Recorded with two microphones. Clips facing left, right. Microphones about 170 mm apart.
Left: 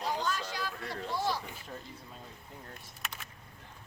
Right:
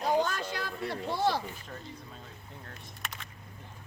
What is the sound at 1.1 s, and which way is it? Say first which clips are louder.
Speech: right 4 dB; 65° right (ahead or behind).